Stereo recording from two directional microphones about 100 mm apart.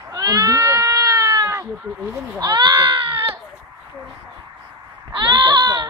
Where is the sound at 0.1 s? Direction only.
40° right (ahead or behind).